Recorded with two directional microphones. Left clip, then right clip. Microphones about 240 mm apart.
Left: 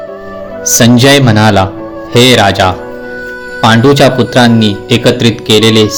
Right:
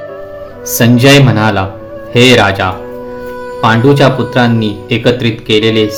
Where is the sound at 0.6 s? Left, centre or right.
Centre.